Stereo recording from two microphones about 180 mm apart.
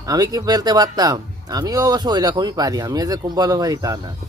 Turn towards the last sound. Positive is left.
turn(degrees=-20)  # may be behind; listen again after turning